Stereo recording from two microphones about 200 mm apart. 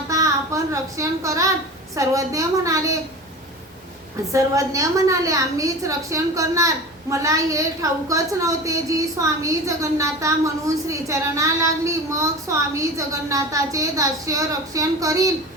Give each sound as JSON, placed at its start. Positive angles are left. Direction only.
{"t": 0.1, "sound": "a child's voice", "side_deg": -15}
{"t": 4.3, "sound": "a woman's voice", "side_deg": -15}